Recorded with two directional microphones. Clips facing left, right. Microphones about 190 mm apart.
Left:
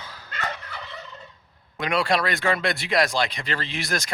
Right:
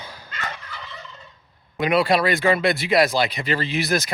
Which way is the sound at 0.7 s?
60° left (ahead or behind).